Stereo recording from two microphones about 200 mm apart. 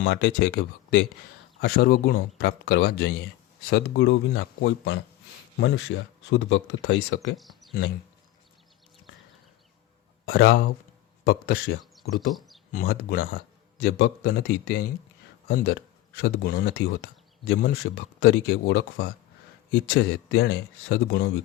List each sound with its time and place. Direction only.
0.0 s speech: 55° left (ahead or behind)
7.3 s a sound: centre (ahead or behind)
10.2 s speech: 60° left (ahead or behind)
11.3 s speech: 50° left (ahead or behind)
12.3 s speech: centre (ahead or behind)
12.7 s speech: 50° left (ahead or behind)